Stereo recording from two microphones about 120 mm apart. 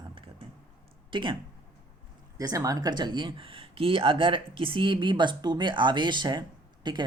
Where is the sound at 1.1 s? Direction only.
45° right (ahead or behind).